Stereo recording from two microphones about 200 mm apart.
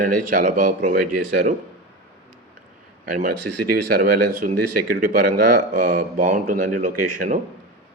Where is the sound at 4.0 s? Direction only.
40° right (ahead or behind).